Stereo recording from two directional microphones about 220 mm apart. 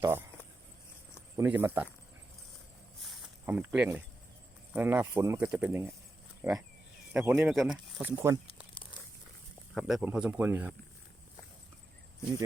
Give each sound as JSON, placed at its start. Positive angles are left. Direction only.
{"t": 0.0, "sound": "speech", "side_deg": -10}
{"t": 1.4, "sound": "speech", "side_deg": -10}
{"t": 3.4, "sound": "speech", "side_deg": -5}
{"t": 9.7, "sound": "speech", "side_deg": -5}